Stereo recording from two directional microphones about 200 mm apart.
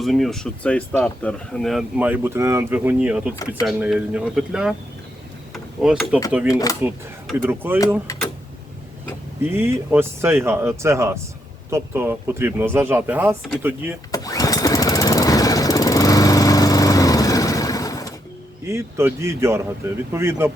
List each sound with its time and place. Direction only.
0.0 s speech: centre (ahead or behind)
5.8 s speech: 5° right (ahead or behind)
6.5 s speech: 15° left (ahead or behind)
7.4 s speech: 10° right (ahead or behind)
9.4 s speech: 10° right (ahead or behind)
14.1 s lawn mower: 15° left (ahead or behind)
18.6 s speech: 15° right (ahead or behind)